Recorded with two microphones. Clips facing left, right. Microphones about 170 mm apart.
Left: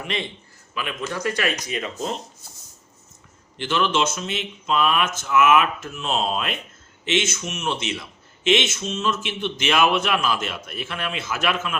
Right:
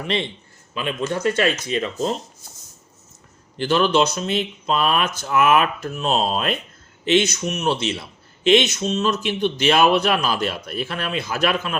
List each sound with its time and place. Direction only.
0.0 s speech: 30° right (ahead or behind)
3.6 s speech: 35° right (ahead or behind)